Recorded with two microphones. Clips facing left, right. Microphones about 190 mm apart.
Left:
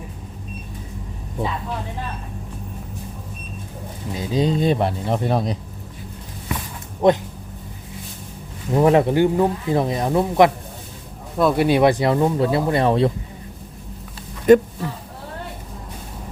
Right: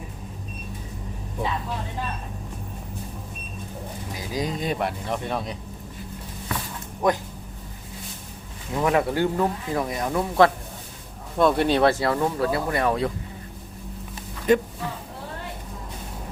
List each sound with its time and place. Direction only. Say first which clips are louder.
4.1 s speech: left 8 dB; 25° left (ahead or behind)
8.7 s speech: left 7 dB; 30° left (ahead or behind)
11.3 s speech: left 3 dB; 5° left (ahead or behind); by 13.1 s 25° left (ahead or behind)
14.5 s speech: left 8 dB; 50° left (ahead or behind)